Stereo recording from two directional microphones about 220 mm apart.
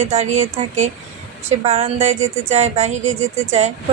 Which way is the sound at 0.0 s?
30° right (ahead or behind).